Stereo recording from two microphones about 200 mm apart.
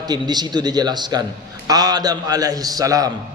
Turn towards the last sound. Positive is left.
turn(degrees=-15)  # may be behind; listen again after turning